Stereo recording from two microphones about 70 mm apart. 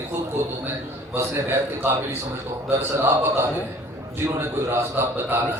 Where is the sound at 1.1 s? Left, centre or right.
Right.